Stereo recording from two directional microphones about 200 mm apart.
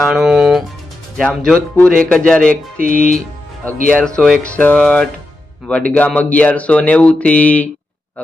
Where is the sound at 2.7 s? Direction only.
45° right (ahead or behind).